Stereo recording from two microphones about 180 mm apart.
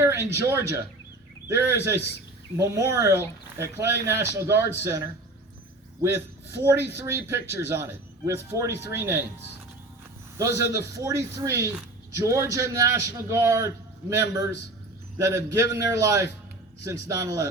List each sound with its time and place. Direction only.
0.0 s a man's voice: 15° right (ahead or behind)
10.3 s a man's voice: 15° right (ahead or behind)